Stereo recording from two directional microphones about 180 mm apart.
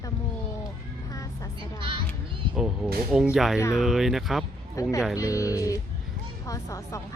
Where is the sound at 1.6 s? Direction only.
30° right (ahead or behind).